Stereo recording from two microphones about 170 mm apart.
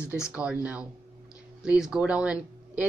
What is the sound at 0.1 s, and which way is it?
Speech, 5° right (ahead or behind).